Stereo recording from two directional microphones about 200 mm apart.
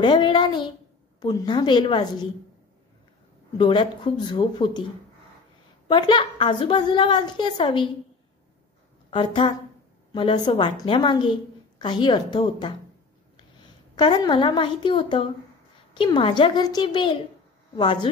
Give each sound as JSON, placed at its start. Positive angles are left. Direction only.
{"t": 0.0, "sound": "a woman's voice", "side_deg": 25}
{"t": 3.5, "sound": "a woman's voice", "side_deg": 25}
{"t": 5.9, "sound": "a woman's voice", "side_deg": 25}
{"t": 9.1, "sound": "a woman's voice", "side_deg": 25}
{"t": 13.9, "sound": "a woman's voice", "side_deg": 20}